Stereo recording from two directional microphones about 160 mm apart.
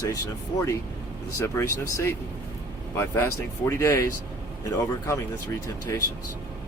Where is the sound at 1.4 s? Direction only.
15° left (ahead or behind).